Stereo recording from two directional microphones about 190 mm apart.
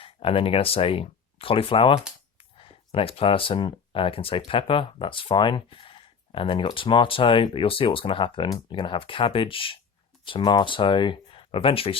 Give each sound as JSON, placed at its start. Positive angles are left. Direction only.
{"t": 0.0, "sound": "speech", "side_deg": 30}